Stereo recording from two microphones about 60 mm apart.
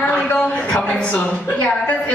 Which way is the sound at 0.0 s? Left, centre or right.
Left.